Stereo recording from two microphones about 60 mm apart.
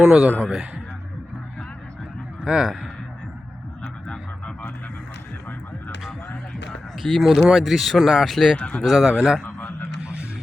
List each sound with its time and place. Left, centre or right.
0.0 s a man's voice: centre
2.4 s speech: centre
4.1 s a sound: centre
7.0 s speech: centre
8.5 s speech: left
8.8 s speech: centre
9.6 s a sound: left
10.0 s music: centre